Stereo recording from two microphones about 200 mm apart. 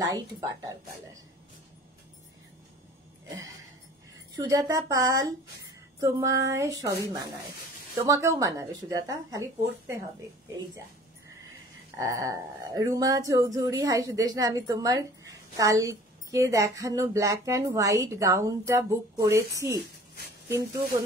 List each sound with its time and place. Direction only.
0.0 s speech: 20° right (ahead or behind)
4.4 s speech: 15° right (ahead or behind)
12.0 s speech: 15° right (ahead or behind)